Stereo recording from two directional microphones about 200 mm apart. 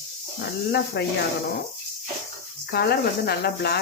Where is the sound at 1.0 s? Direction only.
55° left (ahead or behind).